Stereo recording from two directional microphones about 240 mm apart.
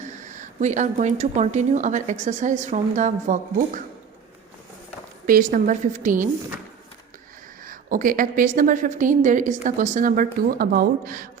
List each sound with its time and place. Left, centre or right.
0.0 s a woman's voice: right
5.2 s a woman's voice: right
7.6 s a woman's voice: right